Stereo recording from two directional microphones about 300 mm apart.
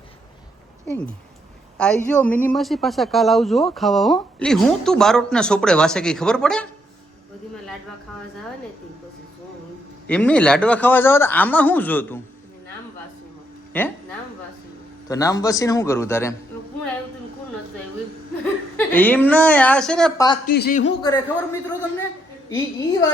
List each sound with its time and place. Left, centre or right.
0.9 s a man's voice: centre
10.1 s a man's voice: centre
13.7 s a man's voice: centre
15.0 s a man's voice: centre
18.8 s a man's voice: centre
20.5 s speech: left
22.4 s a man's voice: centre